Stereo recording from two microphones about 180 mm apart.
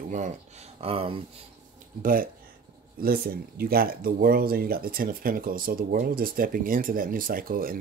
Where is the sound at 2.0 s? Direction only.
50° right (ahead or behind).